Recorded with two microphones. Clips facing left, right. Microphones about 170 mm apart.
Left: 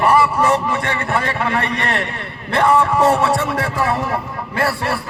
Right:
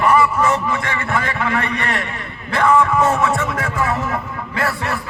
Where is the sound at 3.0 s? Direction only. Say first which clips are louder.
Left 2 dB; 35° left (ahead or behind).